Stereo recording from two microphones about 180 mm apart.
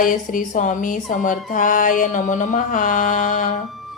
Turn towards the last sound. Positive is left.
turn(degrees=45)  # may be behind; listen again after turning